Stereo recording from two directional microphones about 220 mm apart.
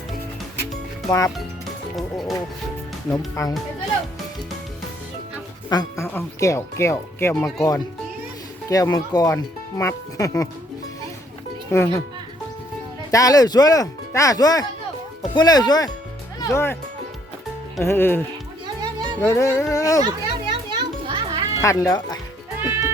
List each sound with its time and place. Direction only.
1.0 s speech: 15° left (ahead or behind)
2.0 s speech: centre (ahead or behind)
3.1 s speech: 15° left (ahead or behind)
5.6 s speech: 15° left (ahead or behind)
11.7 s speech: 10° left (ahead or behind)
13.1 s speech: 15° left (ahead or behind)
17.8 s speech: 10° left (ahead or behind)
19.2 s speech: 10° left (ahead or behind)
20.1 s children playing: 20° right (ahead or behind)
21.6 s speech: 15° left (ahead or behind)